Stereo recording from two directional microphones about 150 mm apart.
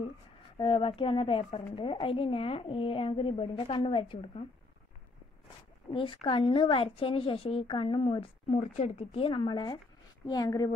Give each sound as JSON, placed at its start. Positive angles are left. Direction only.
{"t": 0.6, "sound": "speech", "side_deg": 35}
{"t": 5.9, "sound": "a woman's voice", "side_deg": 35}